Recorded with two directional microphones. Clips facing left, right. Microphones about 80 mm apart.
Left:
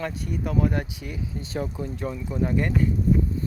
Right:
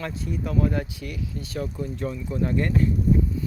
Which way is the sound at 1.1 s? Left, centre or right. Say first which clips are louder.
Left 2 dB; left.